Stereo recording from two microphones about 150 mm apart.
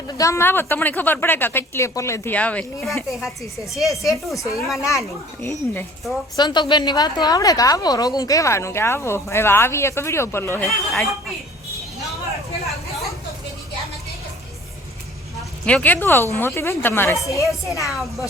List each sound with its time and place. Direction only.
0.1 s speech: 20° left (ahead or behind); by 3.8 s centre (ahead or behind)
3.8 s a woman's voice: 20° left (ahead or behind)
4.6 s speech: centre (ahead or behind)
5.4 s speech: 15° left (ahead or behind)
6.3 s a woman's voice: 30° left (ahead or behind)
10.7 s speech: centre (ahead or behind)
15.6 s speech: 10° left (ahead or behind)
17.9 s speech: centre (ahead or behind)